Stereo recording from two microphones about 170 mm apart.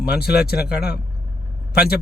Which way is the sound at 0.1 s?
65° left (ahead or behind).